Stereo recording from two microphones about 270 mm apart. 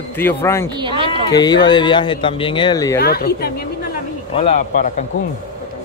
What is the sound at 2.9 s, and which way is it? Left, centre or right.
Speech, left.